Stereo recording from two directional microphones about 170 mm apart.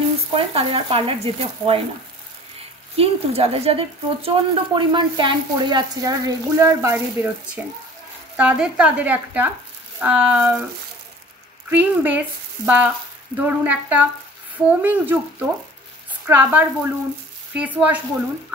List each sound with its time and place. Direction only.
0.3 s stir: 30° right (ahead or behind)
3.0 s a woman's voice: 35° right (ahead or behind); by 10.6 s 10° right (ahead or behind)
11.7 s speech: 10° right (ahead or behind)
16.3 s speech: 10° right (ahead or behind)